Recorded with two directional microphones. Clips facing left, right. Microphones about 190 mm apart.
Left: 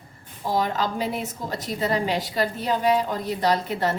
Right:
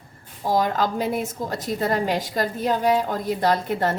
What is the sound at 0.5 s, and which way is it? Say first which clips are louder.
A woman's voice: right 3 dB; 45° right (ahead or behind).